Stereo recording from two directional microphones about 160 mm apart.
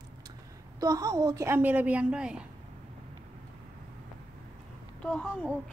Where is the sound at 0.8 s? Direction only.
20° right (ahead or behind); by 2.5 s 5° right (ahead or behind).